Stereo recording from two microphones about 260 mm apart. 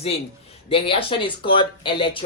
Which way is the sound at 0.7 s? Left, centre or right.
Left.